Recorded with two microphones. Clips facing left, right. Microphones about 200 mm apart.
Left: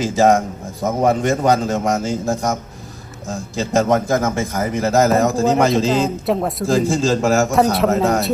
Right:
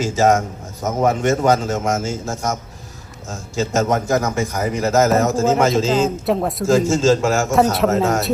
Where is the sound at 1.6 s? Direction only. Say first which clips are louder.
Left 2 dB; 35° left (ahead or behind).